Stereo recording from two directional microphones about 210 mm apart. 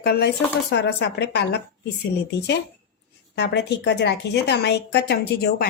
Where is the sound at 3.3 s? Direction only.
55° left (ahead or behind).